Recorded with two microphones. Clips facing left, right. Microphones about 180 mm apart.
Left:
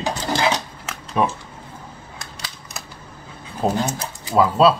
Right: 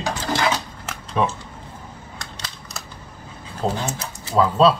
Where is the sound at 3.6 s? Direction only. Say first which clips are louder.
Left 3 dB; 15° left (ahead or behind).